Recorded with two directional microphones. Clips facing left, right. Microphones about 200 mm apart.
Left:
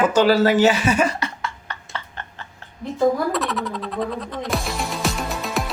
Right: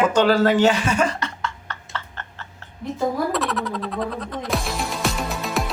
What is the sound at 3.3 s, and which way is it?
Music, centre (ahead or behind).